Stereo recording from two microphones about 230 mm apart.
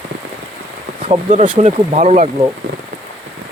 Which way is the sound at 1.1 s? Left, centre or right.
Right.